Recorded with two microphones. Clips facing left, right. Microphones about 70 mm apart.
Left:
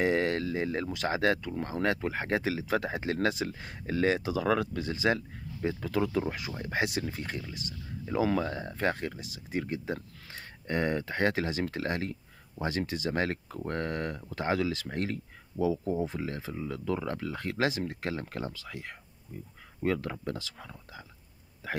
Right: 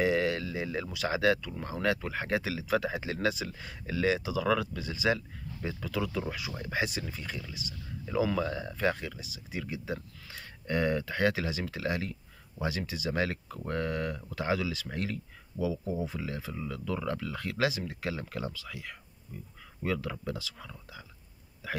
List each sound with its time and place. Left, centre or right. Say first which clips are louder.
0.0 s speech: left 1 dB; left
8.0 s speech: left 1 dB; left
20.5 s speech: left 1 dB; left
21.6 s a sound: left 1 dB; left